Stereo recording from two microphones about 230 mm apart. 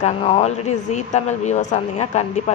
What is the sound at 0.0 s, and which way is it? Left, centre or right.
Speech, left.